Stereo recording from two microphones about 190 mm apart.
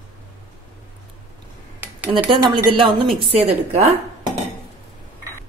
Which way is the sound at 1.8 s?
10° right (ahead or behind).